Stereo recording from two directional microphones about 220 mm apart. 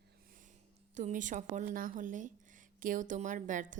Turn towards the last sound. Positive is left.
turn(degrees=-35)  # may be behind; listen again after turning